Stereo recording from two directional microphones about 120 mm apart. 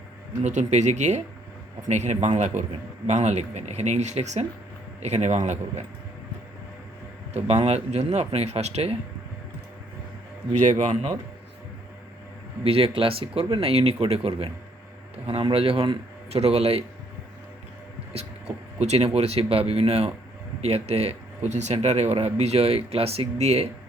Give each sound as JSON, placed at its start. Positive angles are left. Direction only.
{"t": 0.4, "sound": "speech", "side_deg": -75}
{"t": 7.3, "sound": "speech", "side_deg": -60}
{"t": 10.6, "sound": "a man's voice", "side_deg": -85}
{"t": 12.6, "sound": "speech", "side_deg": -55}
{"t": 18.1, "sound": "speech", "side_deg": -60}